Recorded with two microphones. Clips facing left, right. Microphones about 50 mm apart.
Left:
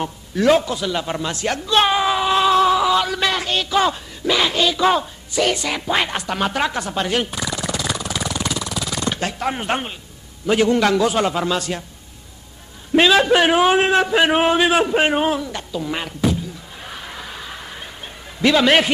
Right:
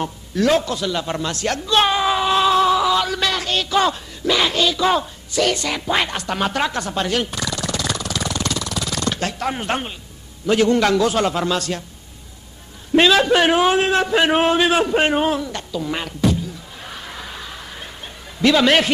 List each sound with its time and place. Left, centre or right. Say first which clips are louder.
0.0 s a man's voice: left 1 dB; centre
7.1 s a sound: even; centre
10.4 s a man's voice: even; centre
12.9 s a man's voice: even; centre
13.7 s a man's voice: left 1 dB; centre
14.0 s a man's voice: even; centre
17.5 s snicker: left 1 dB; centre